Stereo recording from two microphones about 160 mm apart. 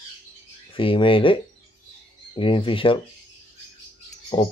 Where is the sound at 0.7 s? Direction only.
35° left (ahead or behind).